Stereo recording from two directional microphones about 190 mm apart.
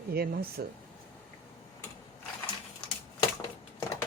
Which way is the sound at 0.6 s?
55° right (ahead or behind).